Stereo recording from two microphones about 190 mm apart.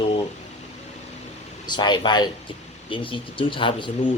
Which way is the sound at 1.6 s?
25° left (ahead or behind).